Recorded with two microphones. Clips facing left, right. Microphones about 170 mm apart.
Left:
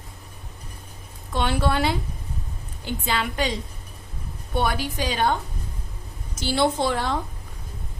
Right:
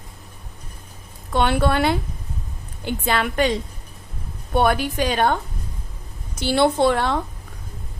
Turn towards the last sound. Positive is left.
turn(degrees=-65)  # may be behind; listen again after turning